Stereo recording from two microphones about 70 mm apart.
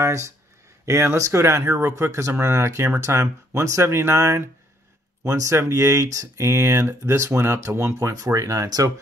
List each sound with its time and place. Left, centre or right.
0.0 s a sound: right
0.8 s speech: right
8.1 s speech: right